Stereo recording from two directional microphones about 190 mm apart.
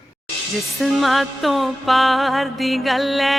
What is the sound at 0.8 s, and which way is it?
Music, centre (ahead or behind).